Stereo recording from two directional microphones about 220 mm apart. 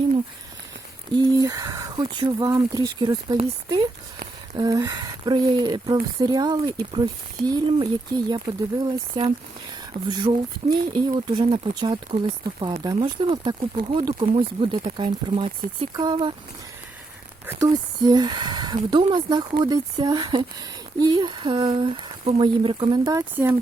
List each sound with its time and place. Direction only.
1.1 s speech: 20° right (ahead or behind)
17.4 s speech: 15° right (ahead or behind)